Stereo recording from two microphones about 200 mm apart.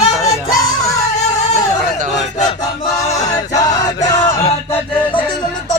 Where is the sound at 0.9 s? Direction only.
35° left (ahead or behind).